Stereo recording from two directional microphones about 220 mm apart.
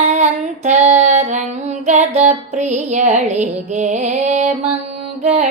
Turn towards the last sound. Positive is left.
turn(degrees=-30)  # may be behind; listen again after turning